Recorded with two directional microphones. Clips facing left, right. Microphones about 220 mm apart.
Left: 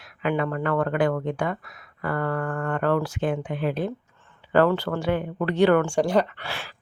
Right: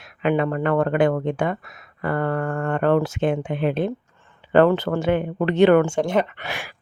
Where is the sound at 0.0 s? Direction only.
25° right (ahead or behind).